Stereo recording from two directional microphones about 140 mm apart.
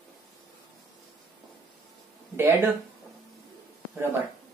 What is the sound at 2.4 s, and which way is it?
Speech, 15° right (ahead or behind).